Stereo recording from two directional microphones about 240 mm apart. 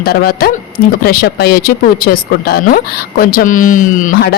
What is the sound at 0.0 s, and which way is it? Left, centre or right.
Speech, left.